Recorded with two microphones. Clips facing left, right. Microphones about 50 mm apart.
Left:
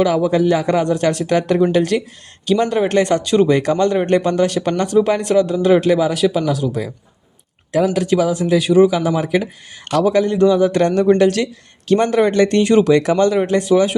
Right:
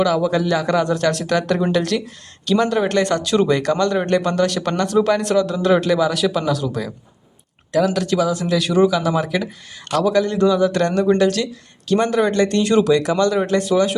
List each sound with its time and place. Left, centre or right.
0.1 s speech: left
3.2 s speech: centre
3.5 s speech: centre
7.9 s speech: centre
8.4 s speech: centre
11.0 s speech: left
13.4 s speech: centre